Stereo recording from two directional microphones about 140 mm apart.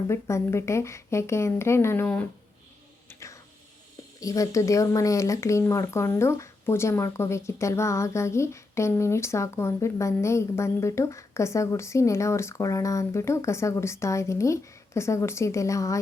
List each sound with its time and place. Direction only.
0.1 s speech: 20° left (ahead or behind)
3.1 s a sound: 20° left (ahead or behind)
4.2 s speech: 25° left (ahead or behind)